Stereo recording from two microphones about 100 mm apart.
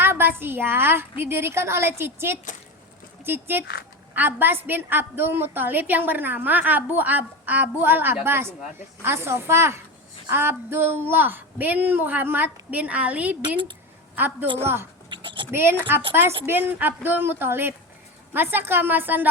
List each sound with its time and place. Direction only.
0.0 s a woman's voice: 20° right (ahead or behind)
15.1 s a sound: 55° right (ahead or behind)
15.5 s a woman's voice: 25° right (ahead or behind)